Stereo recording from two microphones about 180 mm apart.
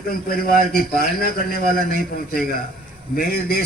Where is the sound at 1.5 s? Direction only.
50° right (ahead or behind).